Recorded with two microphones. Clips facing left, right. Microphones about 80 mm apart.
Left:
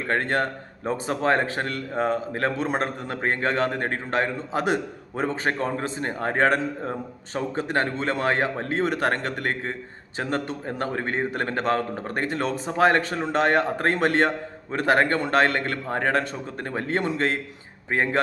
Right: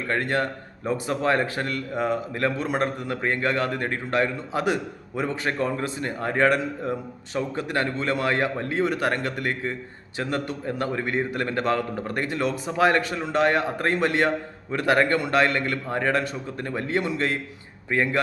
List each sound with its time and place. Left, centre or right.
0.1 s a man's voice: left